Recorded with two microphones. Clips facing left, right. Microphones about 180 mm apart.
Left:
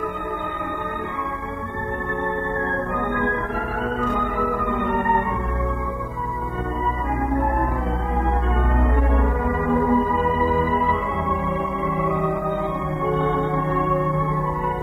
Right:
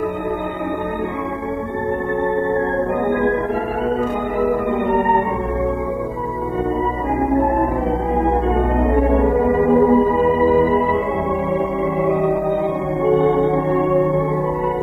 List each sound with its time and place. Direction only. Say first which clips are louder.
3.1 s music: right 7 dB; 25° right (ahead or behind)
8.2 s music: right 7 dB; 25° right (ahead or behind)
13.0 s singing bowl: right 8 dB; 25° right (ahead or behind)